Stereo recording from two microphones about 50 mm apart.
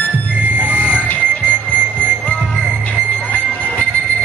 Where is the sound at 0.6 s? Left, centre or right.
Right.